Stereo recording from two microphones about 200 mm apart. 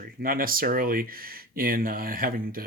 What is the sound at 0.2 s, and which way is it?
Speech, 45° right (ahead or behind).